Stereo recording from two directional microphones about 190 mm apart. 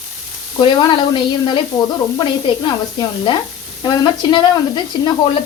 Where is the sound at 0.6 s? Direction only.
25° left (ahead or behind).